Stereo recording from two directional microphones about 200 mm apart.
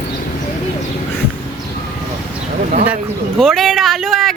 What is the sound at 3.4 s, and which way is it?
Speech, centre (ahead or behind).